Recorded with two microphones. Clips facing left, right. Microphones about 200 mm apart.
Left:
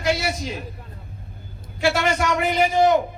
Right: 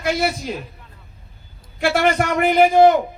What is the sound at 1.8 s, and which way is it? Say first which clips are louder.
A man's voice: right 3 dB; 55° right (ahead or behind).